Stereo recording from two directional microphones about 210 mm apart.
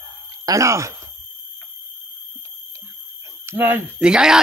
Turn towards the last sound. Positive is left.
turn(degrees=-5)  # may be behind; listen again after turning